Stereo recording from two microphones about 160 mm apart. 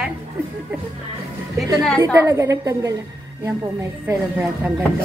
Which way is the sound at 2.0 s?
20° right (ahead or behind).